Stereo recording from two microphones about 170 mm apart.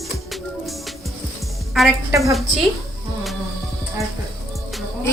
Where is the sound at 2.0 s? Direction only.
20° right (ahead or behind).